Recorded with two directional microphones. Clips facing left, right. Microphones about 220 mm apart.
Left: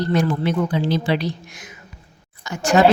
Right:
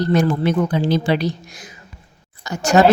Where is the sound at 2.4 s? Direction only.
40° right (ahead or behind).